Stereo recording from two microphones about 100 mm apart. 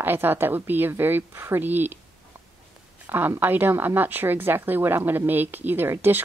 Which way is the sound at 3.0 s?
20° right (ahead or behind).